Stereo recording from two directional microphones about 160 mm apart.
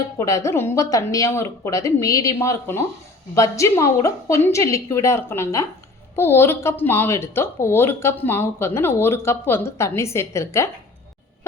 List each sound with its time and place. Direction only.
0.2 s a woman's voice: 20° left (ahead or behind)